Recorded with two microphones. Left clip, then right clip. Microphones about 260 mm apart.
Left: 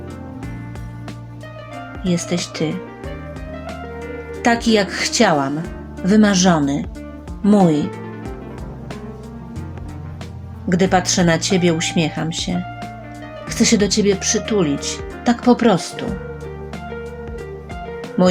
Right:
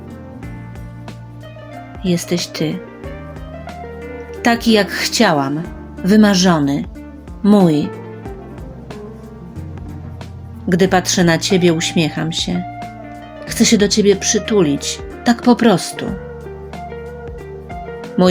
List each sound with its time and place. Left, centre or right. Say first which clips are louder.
2.0 s speech: right 3 dB; centre
3.7 s music: right 1 dB; centre
4.4 s speech: right 2 dB; centre
5.5 s music: right 1 dB; centre
6.1 s speech: right 2 dB; centre
10.7 s speech: right 2 dB; centre
16.7 s music: right 2 dB; centre